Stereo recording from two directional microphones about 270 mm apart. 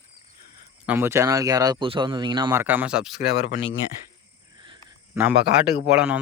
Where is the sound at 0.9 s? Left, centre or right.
Centre.